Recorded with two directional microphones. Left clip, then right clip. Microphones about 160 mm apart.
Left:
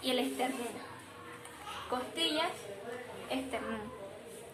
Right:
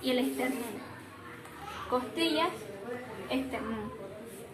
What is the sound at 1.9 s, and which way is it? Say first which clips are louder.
Speech: right 5 dB; 15° left (ahead or behind).